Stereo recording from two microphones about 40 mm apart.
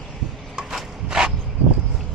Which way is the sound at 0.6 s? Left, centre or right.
Centre.